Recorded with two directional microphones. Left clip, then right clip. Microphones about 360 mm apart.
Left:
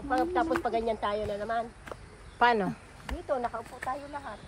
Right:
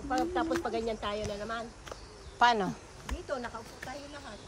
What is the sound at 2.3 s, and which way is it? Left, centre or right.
Speech, centre.